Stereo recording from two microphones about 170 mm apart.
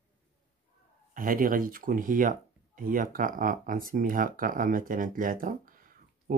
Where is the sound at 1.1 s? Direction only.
55° right (ahead or behind).